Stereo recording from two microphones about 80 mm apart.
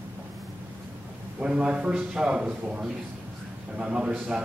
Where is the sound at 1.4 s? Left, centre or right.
Centre.